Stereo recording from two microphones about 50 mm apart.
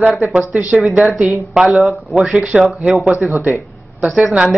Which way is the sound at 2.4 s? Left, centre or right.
Centre.